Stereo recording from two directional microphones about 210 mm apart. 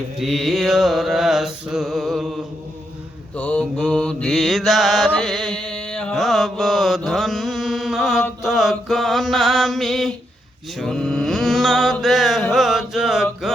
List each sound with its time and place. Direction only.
0.2 s mantra: centre (ahead or behind)
3.3 s mantra: 5° left (ahead or behind)
13.4 s music: centre (ahead or behind)